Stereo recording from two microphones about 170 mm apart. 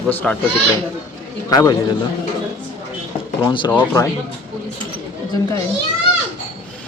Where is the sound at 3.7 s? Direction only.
20° left (ahead or behind).